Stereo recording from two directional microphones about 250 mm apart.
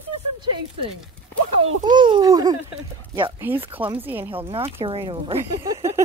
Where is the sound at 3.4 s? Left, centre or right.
Centre.